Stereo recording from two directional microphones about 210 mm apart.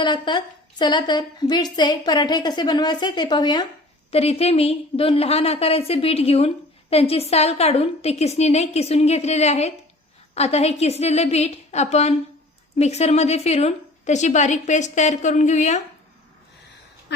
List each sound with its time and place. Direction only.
0.0 s a woman's voice: 20° left (ahead or behind)